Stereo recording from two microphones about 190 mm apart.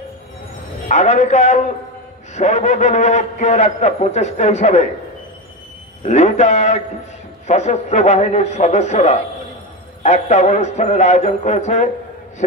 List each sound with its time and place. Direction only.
0.8 s a man's voice: 35° left (ahead or behind)
6.0 s a man's voice: 35° left (ahead or behind)